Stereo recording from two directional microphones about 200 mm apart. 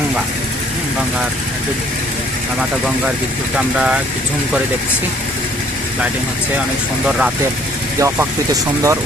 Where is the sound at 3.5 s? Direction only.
5° right (ahead or behind).